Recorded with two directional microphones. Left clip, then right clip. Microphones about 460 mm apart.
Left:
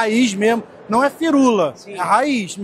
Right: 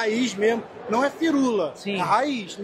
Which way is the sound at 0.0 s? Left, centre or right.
Left.